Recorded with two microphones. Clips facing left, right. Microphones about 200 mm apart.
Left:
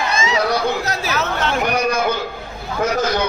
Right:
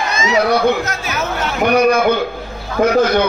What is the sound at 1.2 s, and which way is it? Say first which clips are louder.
Speech: right 2 dB; 10° right (ahead or behind).